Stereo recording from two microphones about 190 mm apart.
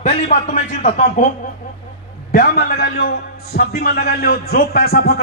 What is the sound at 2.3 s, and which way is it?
A man's voice, 50° left (ahead or behind).